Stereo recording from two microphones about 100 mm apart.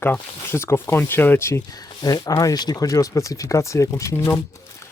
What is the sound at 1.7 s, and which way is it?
Speech, 40° left (ahead or behind).